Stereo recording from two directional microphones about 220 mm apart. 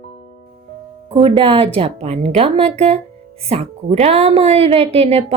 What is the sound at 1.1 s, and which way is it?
A woman's voice, 25° right (ahead or behind).